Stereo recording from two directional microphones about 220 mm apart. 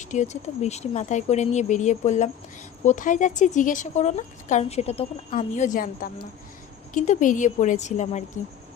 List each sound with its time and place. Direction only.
0.0 s speech: 35° left (ahead or behind)